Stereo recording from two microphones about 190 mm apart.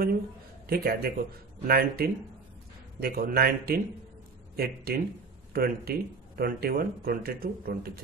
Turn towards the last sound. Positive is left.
turn(degrees=-55)  # may be behind; listen again after turning